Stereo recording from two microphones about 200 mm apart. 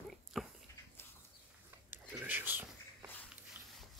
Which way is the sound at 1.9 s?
10° right (ahead or behind).